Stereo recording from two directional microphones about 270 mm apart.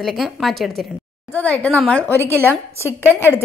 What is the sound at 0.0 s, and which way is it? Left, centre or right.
A woman's voice, centre.